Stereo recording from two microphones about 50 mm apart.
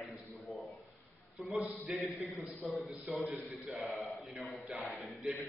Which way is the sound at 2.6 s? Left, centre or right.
Right.